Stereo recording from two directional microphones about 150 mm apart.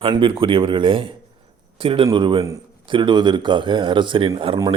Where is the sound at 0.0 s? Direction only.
35° right (ahead or behind).